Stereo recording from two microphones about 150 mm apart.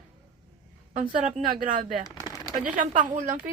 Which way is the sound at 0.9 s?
60° right (ahead or behind).